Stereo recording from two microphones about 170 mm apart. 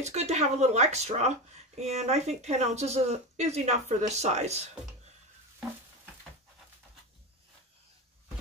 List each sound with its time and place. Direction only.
0.0 s speech: 40° right (ahead or behind)